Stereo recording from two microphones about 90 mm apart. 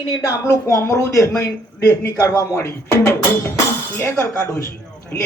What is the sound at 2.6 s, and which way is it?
Speech, 30° left (ahead or behind).